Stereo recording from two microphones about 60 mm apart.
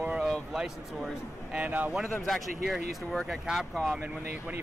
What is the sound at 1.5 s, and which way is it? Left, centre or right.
Speech, right.